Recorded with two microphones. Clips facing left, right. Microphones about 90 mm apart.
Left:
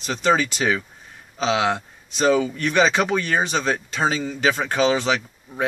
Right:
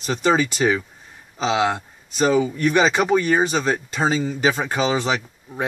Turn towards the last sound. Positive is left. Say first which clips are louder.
# even
turn(degrees=-15)  # may be behind; listen again after turning